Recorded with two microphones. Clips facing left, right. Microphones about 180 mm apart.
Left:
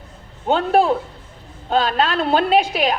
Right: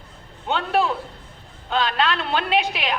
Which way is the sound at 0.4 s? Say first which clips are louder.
Left 6 dB; 40° left (ahead or behind).